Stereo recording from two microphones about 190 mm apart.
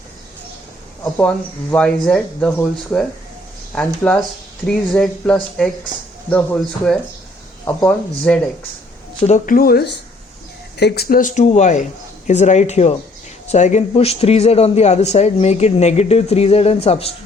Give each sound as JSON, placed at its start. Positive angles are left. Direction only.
{"t": 1.7, "sound": "speech", "side_deg": 5}
{"t": 9.2, "sound": "a man's voice", "side_deg": 40}